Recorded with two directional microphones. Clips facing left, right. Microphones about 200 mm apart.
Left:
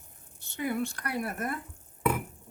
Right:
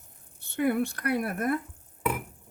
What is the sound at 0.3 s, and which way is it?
Speech, 55° right (ahead or behind).